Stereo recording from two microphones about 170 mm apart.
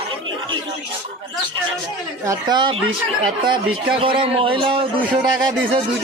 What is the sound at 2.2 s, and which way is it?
Speech, 25° right (ahead or behind).